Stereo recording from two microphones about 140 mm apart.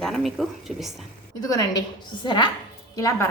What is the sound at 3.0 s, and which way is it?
Speech, 20° left (ahead or behind).